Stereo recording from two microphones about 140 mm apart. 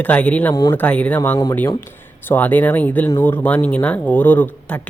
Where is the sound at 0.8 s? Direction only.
10° left (ahead or behind).